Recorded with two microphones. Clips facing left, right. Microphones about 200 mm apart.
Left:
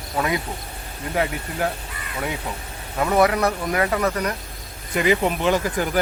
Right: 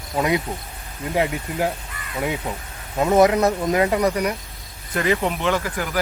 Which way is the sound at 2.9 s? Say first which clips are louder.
Right 3 dB; 20° right (ahead or behind).